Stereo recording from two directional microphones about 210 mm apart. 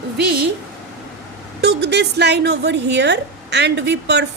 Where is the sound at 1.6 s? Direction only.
55° right (ahead or behind).